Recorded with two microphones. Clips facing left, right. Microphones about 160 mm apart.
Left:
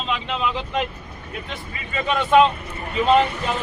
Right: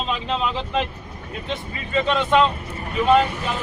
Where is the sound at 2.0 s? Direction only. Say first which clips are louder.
Left 3 dB; 10° left (ahead or behind).